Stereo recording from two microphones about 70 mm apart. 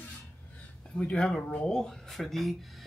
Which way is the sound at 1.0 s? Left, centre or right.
Centre.